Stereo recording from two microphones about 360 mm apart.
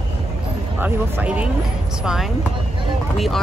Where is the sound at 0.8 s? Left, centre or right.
Centre.